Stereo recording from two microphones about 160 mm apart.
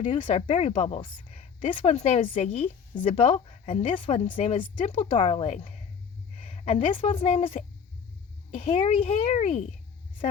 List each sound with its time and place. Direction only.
0.2 s speech: 50° left (ahead or behind)
0.4 s a woman's voice: 40° left (ahead or behind)
4.9 s a woman's voice: 45° left (ahead or behind)